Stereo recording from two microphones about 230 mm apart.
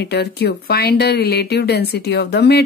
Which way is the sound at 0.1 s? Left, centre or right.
Left.